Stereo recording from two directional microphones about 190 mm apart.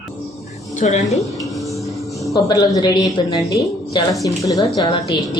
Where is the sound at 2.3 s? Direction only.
20° left (ahead or behind).